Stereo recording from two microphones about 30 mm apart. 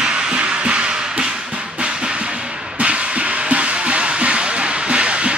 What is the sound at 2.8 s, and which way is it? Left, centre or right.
Music, right.